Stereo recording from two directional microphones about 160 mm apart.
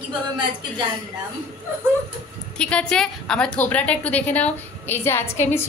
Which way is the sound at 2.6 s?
5° left (ahead or behind).